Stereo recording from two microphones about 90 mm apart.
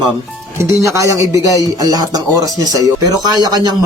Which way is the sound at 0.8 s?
35° right (ahead or behind).